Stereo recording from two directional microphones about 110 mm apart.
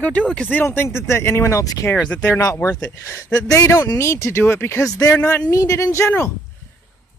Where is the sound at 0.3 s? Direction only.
15° left (ahead or behind).